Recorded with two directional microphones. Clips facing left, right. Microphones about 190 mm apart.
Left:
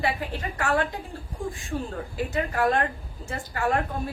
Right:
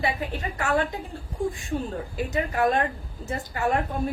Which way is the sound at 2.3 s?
20° right (ahead or behind).